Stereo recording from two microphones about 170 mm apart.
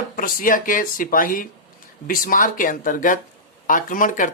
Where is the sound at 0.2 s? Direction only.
55° left (ahead or behind).